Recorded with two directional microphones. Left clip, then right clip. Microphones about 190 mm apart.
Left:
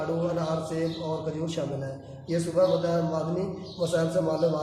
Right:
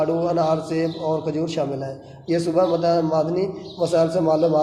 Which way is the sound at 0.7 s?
30° right (ahead or behind).